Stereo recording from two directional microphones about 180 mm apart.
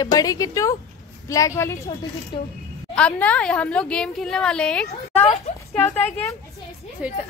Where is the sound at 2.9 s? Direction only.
5° left (ahead or behind).